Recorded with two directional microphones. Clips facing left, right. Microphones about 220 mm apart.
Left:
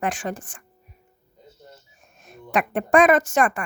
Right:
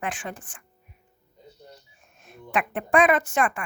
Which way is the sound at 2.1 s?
40° left (ahead or behind).